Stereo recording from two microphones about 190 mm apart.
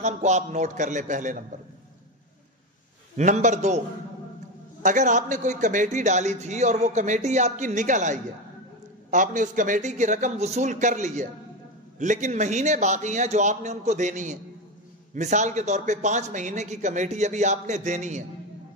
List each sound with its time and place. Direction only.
0.0 s a man's voice: 40° right (ahead or behind)
3.2 s a man's voice: 40° right (ahead or behind)
4.8 s a man's voice: 40° right (ahead or behind)